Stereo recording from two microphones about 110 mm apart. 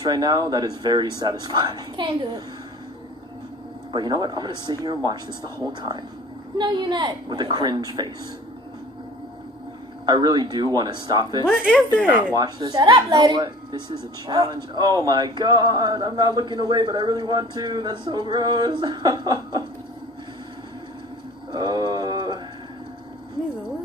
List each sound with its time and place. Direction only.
0.0 s speech: 40° right (ahead or behind)
3.9 s speech: 40° right (ahead or behind)
10.0 s speech: 40° right (ahead or behind)
11.7 s speech: 10° left (ahead or behind)
12.4 s speech: 40° right (ahead or behind)
21.5 s mantra: 40° right (ahead or behind)